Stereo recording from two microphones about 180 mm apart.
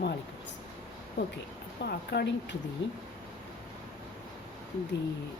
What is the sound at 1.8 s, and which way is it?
Speech, 65° left (ahead or behind).